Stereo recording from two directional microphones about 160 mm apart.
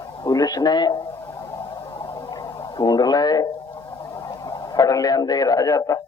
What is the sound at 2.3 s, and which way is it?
Radio, 25° left (ahead or behind).